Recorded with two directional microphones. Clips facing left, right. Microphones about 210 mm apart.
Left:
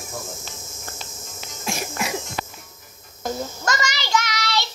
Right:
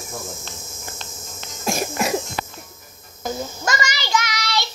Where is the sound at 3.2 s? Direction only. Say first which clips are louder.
Even; 5° right (ahead or behind).